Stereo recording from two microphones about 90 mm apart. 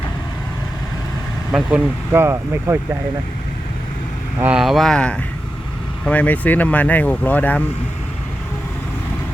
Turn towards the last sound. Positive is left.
turn(degrees=20)  # may be behind; listen again after turning